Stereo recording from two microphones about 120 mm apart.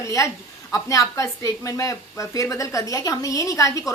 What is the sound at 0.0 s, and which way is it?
A woman's voice, 25° left (ahead or behind).